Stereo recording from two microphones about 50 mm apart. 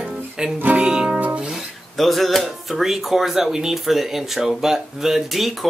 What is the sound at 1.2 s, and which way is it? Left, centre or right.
Music, right.